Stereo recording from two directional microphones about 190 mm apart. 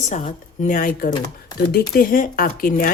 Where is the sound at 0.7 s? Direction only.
45° left (ahead or behind).